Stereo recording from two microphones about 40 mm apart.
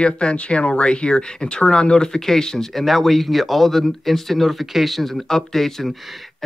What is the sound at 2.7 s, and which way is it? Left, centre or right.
Speech, centre.